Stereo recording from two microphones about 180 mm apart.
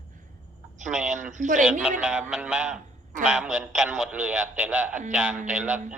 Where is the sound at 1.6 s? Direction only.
5° right (ahead or behind).